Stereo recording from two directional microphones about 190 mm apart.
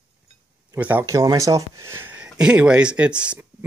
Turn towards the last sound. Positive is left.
turn(degrees=-10)  # may be behind; listen again after turning